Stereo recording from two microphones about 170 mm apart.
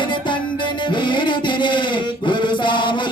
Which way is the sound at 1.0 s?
25° left (ahead or behind).